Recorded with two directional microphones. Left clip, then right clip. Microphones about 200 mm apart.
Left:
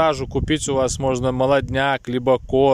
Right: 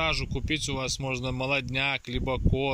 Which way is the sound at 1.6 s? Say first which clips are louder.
Left 9 dB; 70° left (ahead or behind).